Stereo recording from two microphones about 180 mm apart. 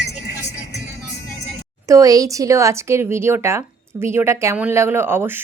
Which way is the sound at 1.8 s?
20° right (ahead or behind).